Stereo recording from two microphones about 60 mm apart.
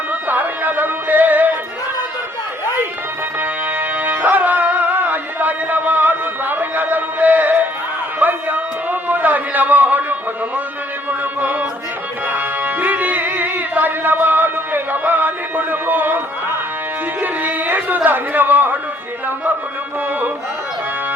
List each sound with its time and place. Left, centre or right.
0.1 s music: right
3.4 s music: right
8.2 s a sound: right
11.1 s music: right
17.2 s speech: right